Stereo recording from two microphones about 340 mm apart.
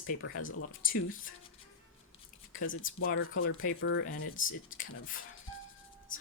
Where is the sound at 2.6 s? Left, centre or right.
Left.